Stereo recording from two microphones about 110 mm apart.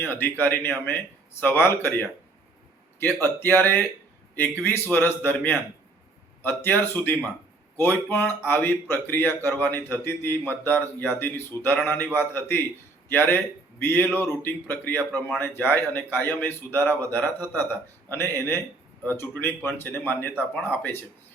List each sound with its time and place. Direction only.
0.0 s speech: 20° left (ahead or behind)
3.2 s speech: 20° left (ahead or behind)